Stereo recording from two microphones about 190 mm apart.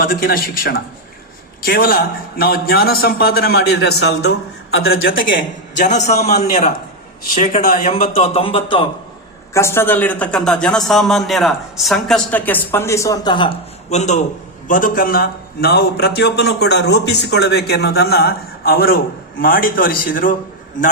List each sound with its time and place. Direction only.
0.0 s a man's voice: 50° left (ahead or behind)
5.8 s a man's voice: 40° left (ahead or behind)
9.5 s a man's voice: 15° left (ahead or behind)
13.9 s a man's voice: 40° left (ahead or behind)